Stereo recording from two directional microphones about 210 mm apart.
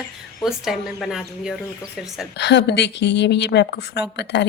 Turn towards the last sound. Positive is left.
turn(degrees=55)  # may be behind; listen again after turning